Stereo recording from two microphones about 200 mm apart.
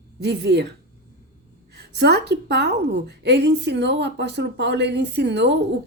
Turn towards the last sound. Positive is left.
turn(degrees=-60)  # may be behind; listen again after turning